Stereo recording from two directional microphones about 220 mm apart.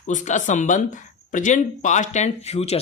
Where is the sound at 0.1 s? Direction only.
35° left (ahead or behind).